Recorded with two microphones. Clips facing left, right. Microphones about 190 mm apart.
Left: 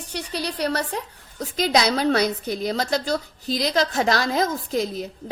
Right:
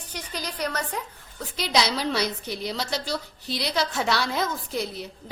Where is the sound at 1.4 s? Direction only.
45° left (ahead or behind).